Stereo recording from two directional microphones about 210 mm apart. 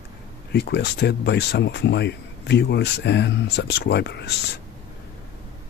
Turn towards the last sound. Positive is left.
turn(degrees=50)  # may be behind; listen again after turning